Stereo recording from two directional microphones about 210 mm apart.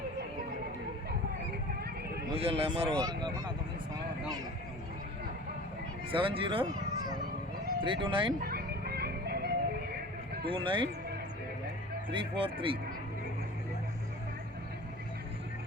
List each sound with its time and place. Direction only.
2.3 s speech: 25° right (ahead or behind)
6.1 s a sound: 25° right (ahead or behind)
8.0 s speech: 25° right (ahead or behind)
8.4 s music: 45° right (ahead or behind)
10.5 s speech: 25° right (ahead or behind)
12.1 s speech: 25° right (ahead or behind)